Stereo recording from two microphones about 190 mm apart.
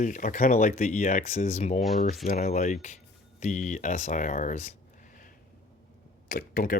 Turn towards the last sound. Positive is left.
turn(degrees=45)  # may be behind; listen again after turning